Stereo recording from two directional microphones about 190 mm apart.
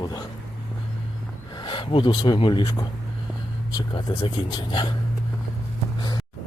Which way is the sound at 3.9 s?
25° left (ahead or behind).